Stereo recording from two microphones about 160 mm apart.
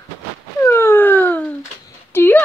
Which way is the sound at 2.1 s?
15° left (ahead or behind).